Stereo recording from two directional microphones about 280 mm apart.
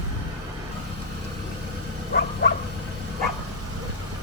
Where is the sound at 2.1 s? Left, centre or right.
Left.